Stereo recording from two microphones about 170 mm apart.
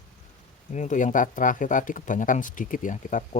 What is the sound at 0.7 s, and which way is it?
Speech, 45° left (ahead or behind).